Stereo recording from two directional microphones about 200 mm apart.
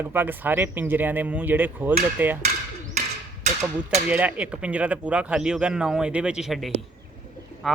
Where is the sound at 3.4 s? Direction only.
35° right (ahead or behind).